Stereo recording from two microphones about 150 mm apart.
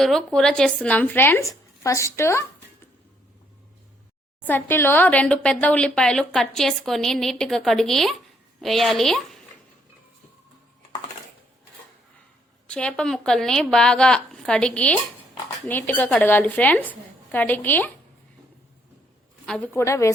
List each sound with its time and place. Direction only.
0.0 s speech: centre (ahead or behind); by 2.4 s 20° left (ahead or behind)
4.4 s a woman's voice: 15° left (ahead or behind)
12.6 s a woman's voice: 5° left (ahead or behind)
19.5 s a woman's voice: 5° left (ahead or behind)
19.7 s a woman's voice: 20° left (ahead or behind)